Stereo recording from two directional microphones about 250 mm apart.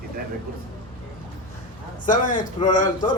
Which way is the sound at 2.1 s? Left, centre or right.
Left.